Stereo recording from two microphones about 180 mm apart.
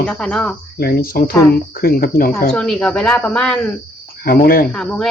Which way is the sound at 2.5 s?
5° left (ahead or behind).